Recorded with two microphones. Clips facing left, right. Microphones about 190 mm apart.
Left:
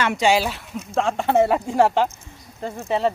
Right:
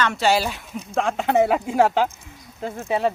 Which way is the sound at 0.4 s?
Centre (ahead or behind).